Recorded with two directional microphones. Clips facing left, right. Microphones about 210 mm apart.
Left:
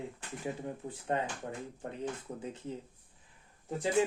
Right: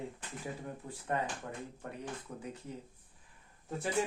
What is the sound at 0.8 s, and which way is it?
Speech, 35° left (ahead or behind).